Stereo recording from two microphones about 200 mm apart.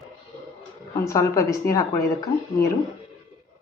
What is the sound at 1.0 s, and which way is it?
A woman's voice, 15° left (ahead or behind).